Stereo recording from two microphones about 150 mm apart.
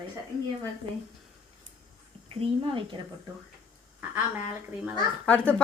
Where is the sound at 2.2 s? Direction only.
40° right (ahead or behind).